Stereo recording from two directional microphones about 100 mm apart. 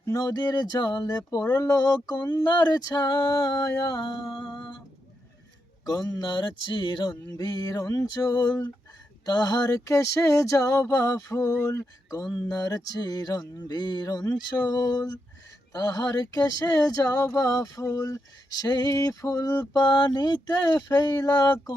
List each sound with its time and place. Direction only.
0.0 s music: 35° left (ahead or behind)
4.3 s humming: 55° left (ahead or behind)
5.8 s music: 40° left (ahead or behind)
19.8 s music: 45° left (ahead or behind)